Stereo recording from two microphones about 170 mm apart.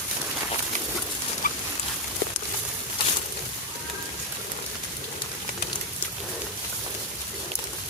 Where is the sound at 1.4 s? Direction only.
55° left (ahead or behind).